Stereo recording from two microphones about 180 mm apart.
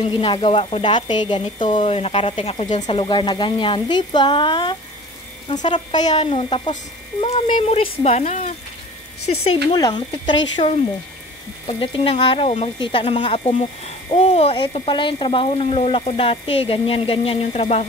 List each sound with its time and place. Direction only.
0.0 s speech: 25° left (ahead or behind)
9.8 s speech: 20° left (ahead or behind)